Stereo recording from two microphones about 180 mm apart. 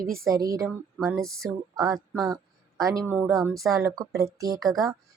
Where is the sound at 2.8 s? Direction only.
20° right (ahead or behind).